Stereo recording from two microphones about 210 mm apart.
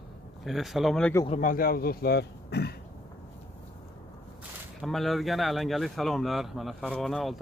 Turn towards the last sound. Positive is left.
turn(degrees=0)  # may be behind; listen again after turning